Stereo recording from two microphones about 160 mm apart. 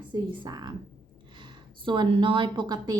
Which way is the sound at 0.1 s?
25° right (ahead or behind).